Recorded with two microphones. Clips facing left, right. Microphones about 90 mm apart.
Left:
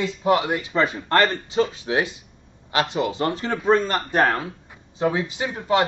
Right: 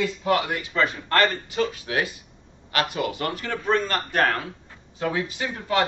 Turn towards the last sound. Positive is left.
turn(degrees=20)  # may be behind; listen again after turning